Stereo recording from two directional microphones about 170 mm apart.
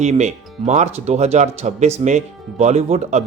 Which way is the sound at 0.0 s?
40° right (ahead or behind).